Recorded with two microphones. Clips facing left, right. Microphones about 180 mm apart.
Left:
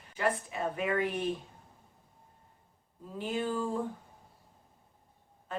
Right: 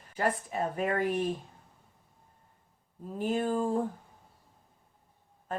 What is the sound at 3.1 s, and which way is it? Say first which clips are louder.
Speech: right 4 dB; 45° right (ahead or behind).